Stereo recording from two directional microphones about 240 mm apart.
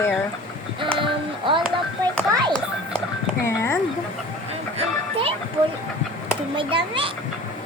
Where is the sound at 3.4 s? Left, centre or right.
Centre.